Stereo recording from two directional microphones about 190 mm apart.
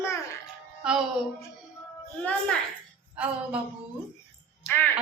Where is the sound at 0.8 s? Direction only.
5° right (ahead or behind).